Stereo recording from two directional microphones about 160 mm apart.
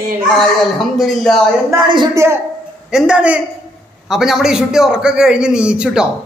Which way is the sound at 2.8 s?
5° right (ahead or behind).